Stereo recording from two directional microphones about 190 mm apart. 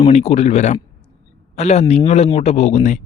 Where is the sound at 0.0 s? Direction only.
35° left (ahead or behind).